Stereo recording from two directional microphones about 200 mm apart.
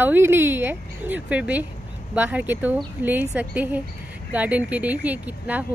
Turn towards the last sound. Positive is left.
turn(degrees=-10)  # may be behind; listen again after turning